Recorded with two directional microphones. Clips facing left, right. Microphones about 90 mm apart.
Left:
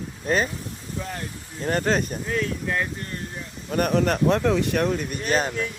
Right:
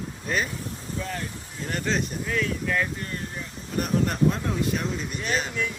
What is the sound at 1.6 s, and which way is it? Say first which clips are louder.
Speech: left 5 dB; 50° left (ahead or behind).